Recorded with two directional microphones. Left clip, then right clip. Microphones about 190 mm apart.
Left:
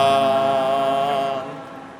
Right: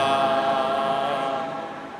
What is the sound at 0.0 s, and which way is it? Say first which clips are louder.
Music: left 4 dB; 50° left (ahead or behind).